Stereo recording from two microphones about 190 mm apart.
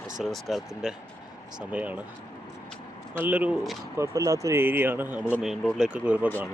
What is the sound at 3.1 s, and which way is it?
Speech, 10° right (ahead or behind).